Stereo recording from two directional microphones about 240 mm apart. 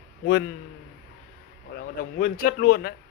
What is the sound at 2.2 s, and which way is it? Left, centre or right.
Speech, left.